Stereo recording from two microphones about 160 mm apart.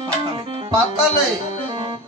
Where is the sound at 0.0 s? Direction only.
30° right (ahead or behind).